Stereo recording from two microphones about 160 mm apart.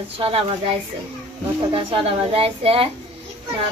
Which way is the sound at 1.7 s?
35° right (ahead or behind).